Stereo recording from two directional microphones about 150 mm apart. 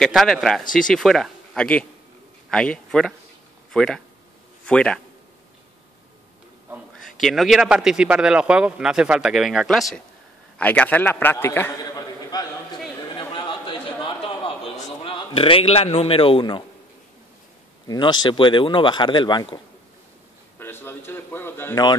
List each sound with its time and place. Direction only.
0.0 s a man's voice: centre (ahead or behind)
7.1 s a man's voice: centre (ahead or behind)
11.8 s a sound: 25° left (ahead or behind)
15.0 s a man's voice: 35° left (ahead or behind)
17.8 s speech: 30° left (ahead or behind)
20.5 s speech: 15° left (ahead or behind)